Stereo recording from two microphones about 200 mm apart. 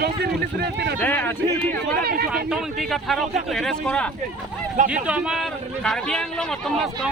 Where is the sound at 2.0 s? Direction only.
50° right (ahead or behind).